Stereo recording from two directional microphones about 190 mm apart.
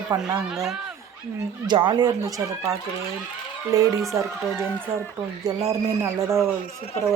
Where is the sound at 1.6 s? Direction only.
25° right (ahead or behind).